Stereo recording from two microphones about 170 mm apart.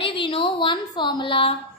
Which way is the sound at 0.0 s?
30° left (ahead or behind).